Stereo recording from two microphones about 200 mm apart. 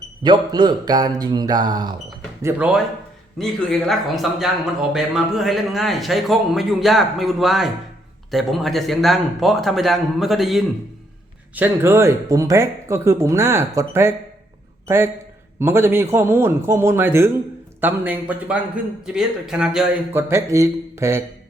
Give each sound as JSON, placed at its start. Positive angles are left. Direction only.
{"t": 0.2, "sound": "speech", "side_deg": -20}
{"t": 2.4, "sound": "a man's voice", "side_deg": -10}
{"t": 20.2, "sound": "speech", "side_deg": -15}